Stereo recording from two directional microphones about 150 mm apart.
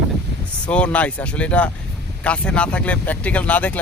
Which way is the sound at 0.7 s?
10° left (ahead or behind).